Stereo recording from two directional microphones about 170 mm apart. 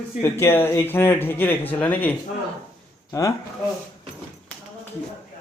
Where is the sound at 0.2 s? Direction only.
15° left (ahead or behind).